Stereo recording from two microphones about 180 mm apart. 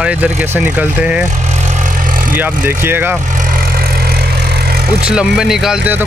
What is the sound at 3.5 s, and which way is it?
Vehicle, 55° right (ahead or behind).